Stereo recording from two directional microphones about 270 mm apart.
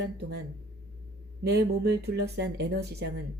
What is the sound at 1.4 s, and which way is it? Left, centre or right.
Speech, right.